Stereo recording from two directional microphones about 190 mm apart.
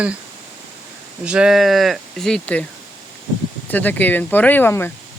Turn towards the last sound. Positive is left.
turn(degrees=10)  # may be behind; listen again after turning